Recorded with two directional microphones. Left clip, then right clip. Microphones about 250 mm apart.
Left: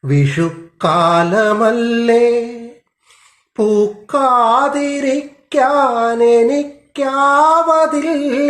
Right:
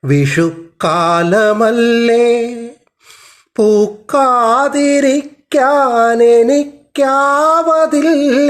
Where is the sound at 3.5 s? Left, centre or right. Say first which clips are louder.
Right 3 dB; right.